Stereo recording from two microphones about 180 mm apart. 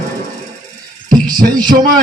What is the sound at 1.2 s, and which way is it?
Heart murmur, 25° right (ahead or behind).